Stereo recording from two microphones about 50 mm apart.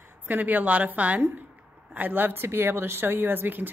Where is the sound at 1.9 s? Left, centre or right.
Right.